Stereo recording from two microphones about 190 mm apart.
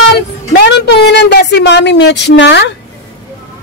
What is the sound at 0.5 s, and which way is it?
Speech, 60° left (ahead or behind).